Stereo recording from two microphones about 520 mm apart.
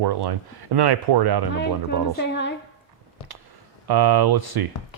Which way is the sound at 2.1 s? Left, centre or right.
Centre.